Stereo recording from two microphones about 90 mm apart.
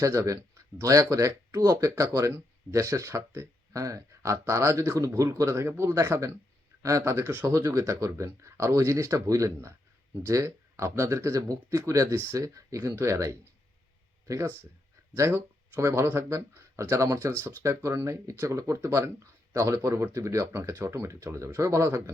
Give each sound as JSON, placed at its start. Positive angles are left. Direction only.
{"t": 0.0, "sound": "speech", "side_deg": -35}